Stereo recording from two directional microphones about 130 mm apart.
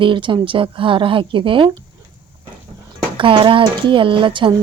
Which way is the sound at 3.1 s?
40° right (ahead or behind).